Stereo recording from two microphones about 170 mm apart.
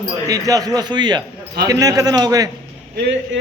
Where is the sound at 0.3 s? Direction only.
20° right (ahead or behind).